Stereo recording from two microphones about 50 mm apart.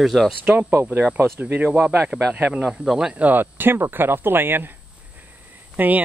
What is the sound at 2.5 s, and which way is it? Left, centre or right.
Speech, centre.